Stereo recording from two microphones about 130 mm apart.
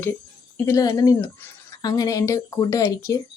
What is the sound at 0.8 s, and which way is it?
Speech, 30° left (ahead or behind).